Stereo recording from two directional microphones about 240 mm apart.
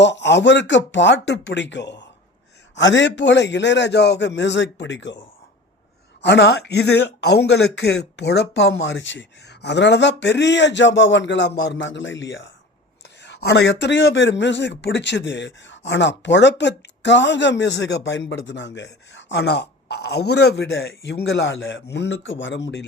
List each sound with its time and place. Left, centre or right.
0.0 s a man's voice: left
6.2 s a man's voice: left